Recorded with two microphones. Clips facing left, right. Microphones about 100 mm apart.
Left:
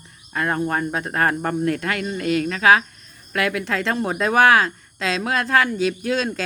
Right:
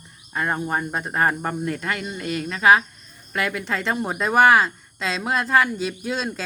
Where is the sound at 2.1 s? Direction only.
60° left (ahead or behind).